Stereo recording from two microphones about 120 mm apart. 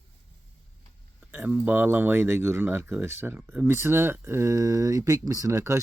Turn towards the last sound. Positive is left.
turn(degrees=-25)  # may be behind; listen again after turning